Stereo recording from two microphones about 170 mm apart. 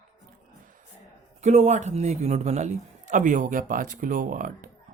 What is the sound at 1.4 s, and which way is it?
Speech, 45° right (ahead or behind).